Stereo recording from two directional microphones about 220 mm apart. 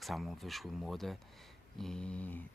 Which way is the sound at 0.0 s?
Centre (ahead or behind).